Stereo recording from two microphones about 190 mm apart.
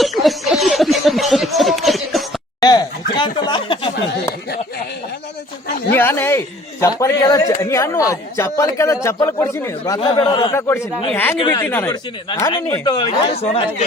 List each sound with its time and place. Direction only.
0.0 s a sound: centre (ahead or behind)
2.6 s speech: 20° left (ahead or behind)
5.9 s speech: 10° left (ahead or behind)
11.1 s speech: 10° left (ahead or behind)
11.3 s speech: 20° left (ahead or behind)
11.6 s speech: 10° left (ahead or behind)
11.9 s speech: 20° left (ahead or behind)